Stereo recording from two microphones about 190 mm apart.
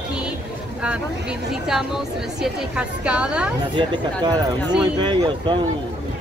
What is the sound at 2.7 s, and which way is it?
Speech, 5° right (ahead or behind).